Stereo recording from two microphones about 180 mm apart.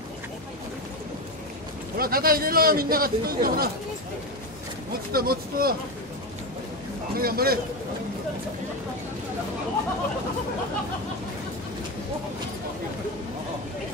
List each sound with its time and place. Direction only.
2.0 s a man's voice: 55° right (ahead or behind)
5.1 s a man's voice: 55° right (ahead or behind)
7.2 s a man's voice: 55° right (ahead or behind)